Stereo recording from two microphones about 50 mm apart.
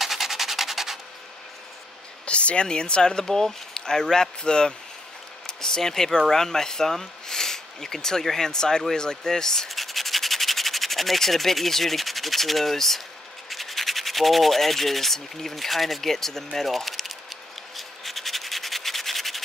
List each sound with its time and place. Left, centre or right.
0.0 s rub: centre
2.2 s speech: left
9.7 s rub: centre
16.5 s a sound: centre